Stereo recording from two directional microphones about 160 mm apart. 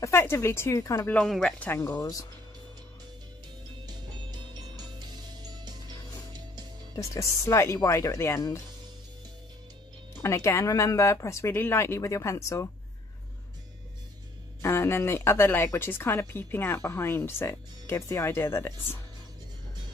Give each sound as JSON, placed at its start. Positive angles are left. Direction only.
{"t": 0.0, "sound": "speech", "side_deg": 15}
{"t": 1.1, "sound": "speech", "side_deg": 5}
{"t": 3.8, "sound": "music", "side_deg": -25}
{"t": 7.0, "sound": "speech", "side_deg": 20}
{"t": 10.2, "sound": "speech", "side_deg": 15}
{"t": 14.6, "sound": "speech", "side_deg": 15}